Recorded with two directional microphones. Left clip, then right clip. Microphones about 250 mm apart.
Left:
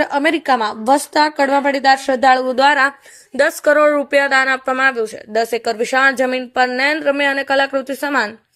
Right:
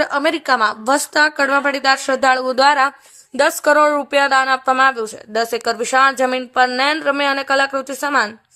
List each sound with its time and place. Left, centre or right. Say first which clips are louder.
0.0 s a woman's voice: left 1 dB; centre